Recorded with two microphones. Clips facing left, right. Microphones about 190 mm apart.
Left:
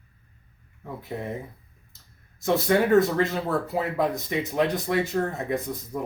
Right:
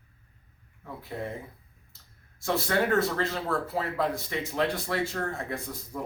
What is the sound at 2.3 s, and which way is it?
A man's voice, 20° left (ahead or behind).